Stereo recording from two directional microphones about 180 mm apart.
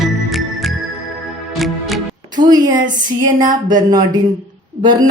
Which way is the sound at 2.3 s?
25° right (ahead or behind).